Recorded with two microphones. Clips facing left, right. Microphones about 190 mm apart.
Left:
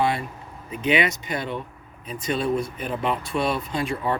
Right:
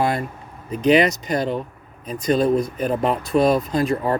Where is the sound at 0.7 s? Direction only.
40° right (ahead or behind).